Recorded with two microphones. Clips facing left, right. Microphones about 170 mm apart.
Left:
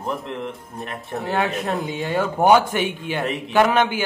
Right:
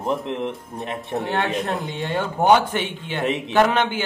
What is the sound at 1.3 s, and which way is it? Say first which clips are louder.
A man's voice: left 2 dB; centre (ahead or behind).